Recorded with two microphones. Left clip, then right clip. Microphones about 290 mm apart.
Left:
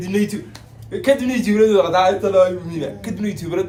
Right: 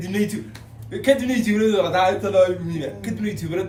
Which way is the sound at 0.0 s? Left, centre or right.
Centre.